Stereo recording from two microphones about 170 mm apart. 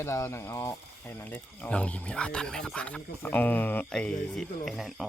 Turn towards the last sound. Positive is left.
turn(degrees=0)  # may be behind; listen again after turning